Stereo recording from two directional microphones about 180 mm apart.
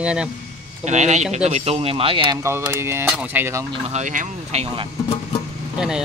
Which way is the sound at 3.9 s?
45° right (ahead or behind).